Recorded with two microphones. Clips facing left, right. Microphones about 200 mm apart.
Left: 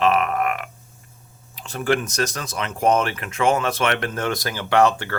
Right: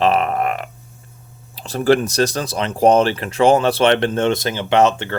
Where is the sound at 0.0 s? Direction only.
30° right (ahead or behind).